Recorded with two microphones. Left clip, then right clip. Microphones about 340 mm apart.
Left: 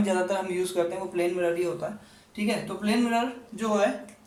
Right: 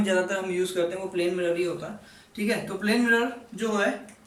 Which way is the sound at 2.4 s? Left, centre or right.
Centre.